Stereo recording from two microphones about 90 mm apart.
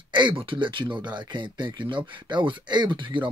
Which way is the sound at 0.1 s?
65° right (ahead or behind).